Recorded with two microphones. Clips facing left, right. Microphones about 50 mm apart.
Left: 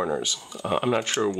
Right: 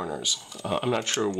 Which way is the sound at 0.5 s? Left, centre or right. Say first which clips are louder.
Left 3 dB; centre.